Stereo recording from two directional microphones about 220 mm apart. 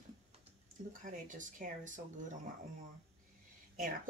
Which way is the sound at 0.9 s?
35° right (ahead or behind).